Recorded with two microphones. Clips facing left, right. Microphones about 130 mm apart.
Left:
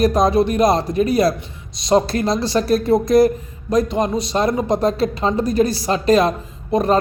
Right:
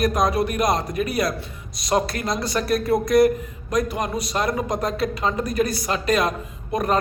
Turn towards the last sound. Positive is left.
turn(degrees=25)  # may be behind; listen again after turning